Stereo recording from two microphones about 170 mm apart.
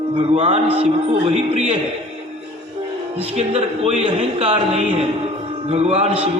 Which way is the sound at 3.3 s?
35° right (ahead or behind).